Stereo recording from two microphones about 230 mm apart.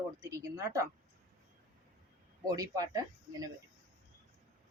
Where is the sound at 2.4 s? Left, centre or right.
Centre.